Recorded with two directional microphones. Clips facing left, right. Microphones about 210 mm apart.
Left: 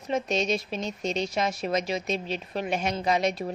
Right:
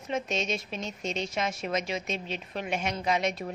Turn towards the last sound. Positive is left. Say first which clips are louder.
# left 3 dB
turn(degrees=35)  # may be behind; listen again after turning